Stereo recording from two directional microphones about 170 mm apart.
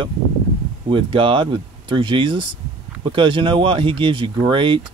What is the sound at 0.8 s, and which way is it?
Speech, 30° right (ahead or behind).